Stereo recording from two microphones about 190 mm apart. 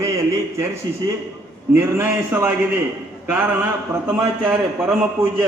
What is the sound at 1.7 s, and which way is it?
A man's voice, 10° right (ahead or behind).